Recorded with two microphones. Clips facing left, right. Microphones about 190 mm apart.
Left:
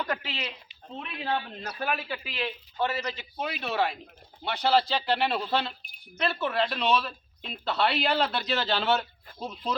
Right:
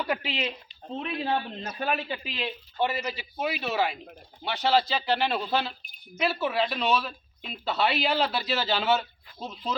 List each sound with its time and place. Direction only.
0.0 s speech: 10° right (ahead or behind)
0.9 s speech: 30° right (ahead or behind); by 9.7 s centre (ahead or behind)